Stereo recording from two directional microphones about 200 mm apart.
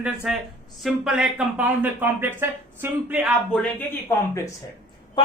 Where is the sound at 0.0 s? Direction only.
5° right (ahead or behind).